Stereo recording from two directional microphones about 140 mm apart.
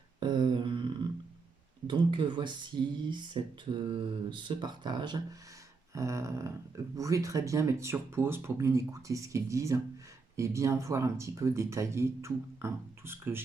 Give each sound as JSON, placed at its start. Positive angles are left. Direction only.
{"t": 0.2, "sound": "a sound", "side_deg": -35}
{"t": 1.9, "sound": "speech", "side_deg": -35}
{"t": 5.9, "sound": "speech", "side_deg": -20}